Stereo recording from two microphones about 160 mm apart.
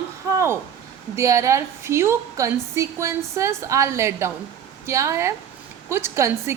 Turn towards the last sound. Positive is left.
turn(degrees=-15)  # may be behind; listen again after turning